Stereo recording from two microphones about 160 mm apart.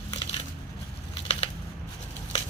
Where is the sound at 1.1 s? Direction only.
35° left (ahead or behind).